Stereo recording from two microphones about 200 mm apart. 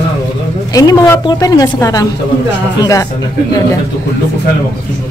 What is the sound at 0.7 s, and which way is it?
Speech, 20° left (ahead or behind).